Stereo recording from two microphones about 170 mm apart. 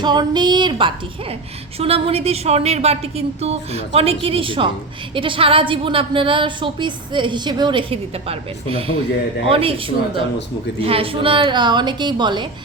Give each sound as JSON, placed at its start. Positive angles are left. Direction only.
{"t": 0.0, "sound": "a woman's voice", "side_deg": -25}